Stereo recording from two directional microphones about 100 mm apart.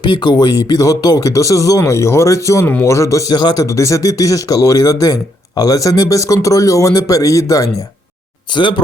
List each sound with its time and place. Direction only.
0.0 s speech: 50° left (ahead or behind); by 7.7 s 35° left (ahead or behind)
8.5 s speech: 50° left (ahead or behind)